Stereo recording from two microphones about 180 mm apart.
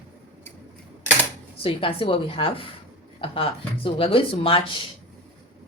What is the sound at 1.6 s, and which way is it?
Speech, 30° left (ahead or behind).